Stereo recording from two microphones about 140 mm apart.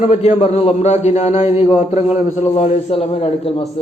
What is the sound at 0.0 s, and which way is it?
A man's voice, 50° left (ahead or behind).